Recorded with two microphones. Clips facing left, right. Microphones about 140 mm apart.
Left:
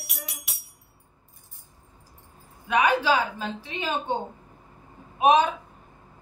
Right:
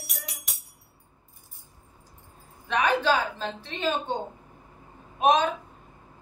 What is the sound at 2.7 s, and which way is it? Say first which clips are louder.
A woman's voice: left 2 dB; 10° left (ahead or behind).